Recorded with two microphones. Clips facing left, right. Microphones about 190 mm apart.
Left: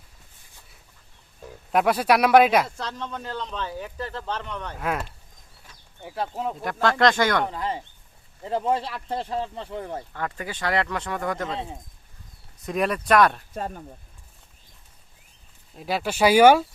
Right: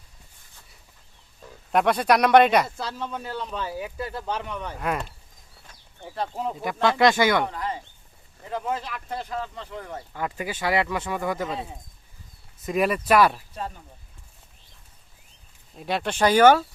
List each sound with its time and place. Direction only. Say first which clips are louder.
1.7 s speech: even; 5° left (ahead or behind)
7.4 s speech: left 1 dB; 20° left (ahead or behind)
10.1 s speech: right 1 dB; 10° right (ahead or behind)
12.6 s speech: right 1 dB; 5° right (ahead or behind)
13.5 s speech: left 3 dB; 50° left (ahead or behind)
15.7 s speech: even; centre (ahead or behind)